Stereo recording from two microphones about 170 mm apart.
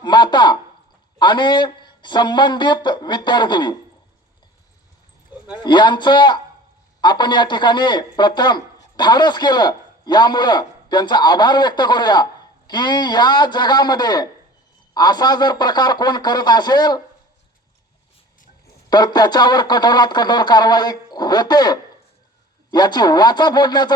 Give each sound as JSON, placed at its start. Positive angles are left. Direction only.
{"t": 0.0, "sound": "a sound", "side_deg": 25}
{"t": 1.2, "sound": "speech", "side_deg": 25}
{"t": 5.6, "sound": "speech", "side_deg": 25}
{"t": 18.9, "sound": "speech", "side_deg": 25}